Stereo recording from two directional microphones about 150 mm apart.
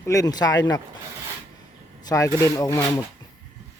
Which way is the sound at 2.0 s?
20° left (ahead or behind).